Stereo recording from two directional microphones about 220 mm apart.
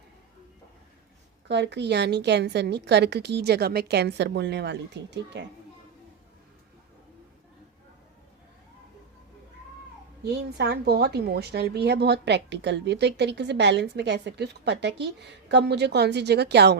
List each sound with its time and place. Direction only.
1.5 s speech: 50° right (ahead or behind)
10.2 s speech: 50° right (ahead or behind)